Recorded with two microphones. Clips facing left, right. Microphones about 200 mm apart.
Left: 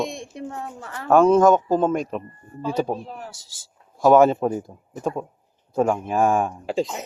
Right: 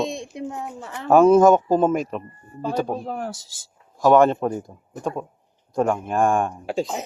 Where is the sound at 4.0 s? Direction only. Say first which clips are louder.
Left 1 dB; 5° left (ahead or behind).